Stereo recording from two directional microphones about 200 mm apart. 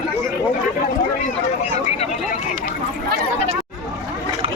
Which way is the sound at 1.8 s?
35° left (ahead or behind).